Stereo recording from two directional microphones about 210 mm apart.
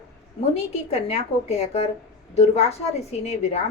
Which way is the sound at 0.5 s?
30° left (ahead or behind).